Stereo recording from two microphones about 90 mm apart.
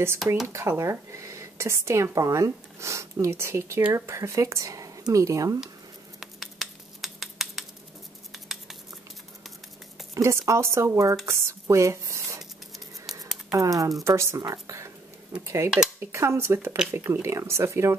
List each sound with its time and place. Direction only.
0.5 s speech: 35° right (ahead or behind)
6.1 s a sound: centre (ahead or behind)
10.1 s speech: 35° right (ahead or behind)
13.6 s speech: 40° right (ahead or behind)